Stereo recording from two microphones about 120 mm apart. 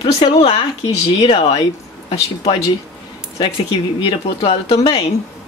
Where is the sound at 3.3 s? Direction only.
50° left (ahead or behind).